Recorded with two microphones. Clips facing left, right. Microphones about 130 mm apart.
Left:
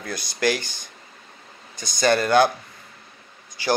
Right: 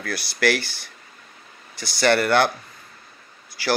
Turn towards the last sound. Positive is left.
turn(degrees=20)  # may be behind; listen again after turning